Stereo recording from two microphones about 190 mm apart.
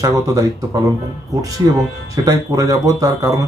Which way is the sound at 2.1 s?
20° right (ahead or behind).